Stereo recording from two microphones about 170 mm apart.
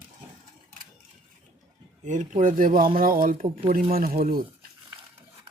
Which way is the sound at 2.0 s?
45° right (ahead or behind).